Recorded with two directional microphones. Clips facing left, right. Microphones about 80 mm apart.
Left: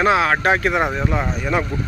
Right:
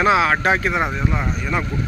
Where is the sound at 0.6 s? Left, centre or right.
Left.